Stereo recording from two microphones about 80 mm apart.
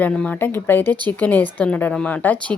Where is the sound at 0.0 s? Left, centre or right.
Centre.